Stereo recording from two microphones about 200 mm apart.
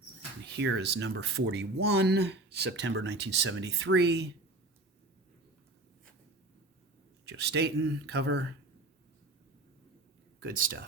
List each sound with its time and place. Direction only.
0.5 s speech: 60° right (ahead or behind)
7.3 s speech: 55° right (ahead or behind)
10.4 s speech: 45° right (ahead or behind)